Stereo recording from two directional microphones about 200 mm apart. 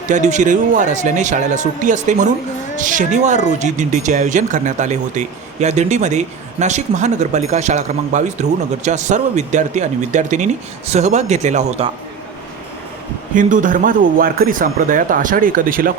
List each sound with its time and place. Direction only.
0.1 s speech: 35° right (ahead or behind)
13.3 s speech: 40° right (ahead or behind)